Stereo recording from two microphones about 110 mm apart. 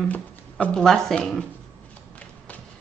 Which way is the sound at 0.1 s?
10° left (ahead or behind).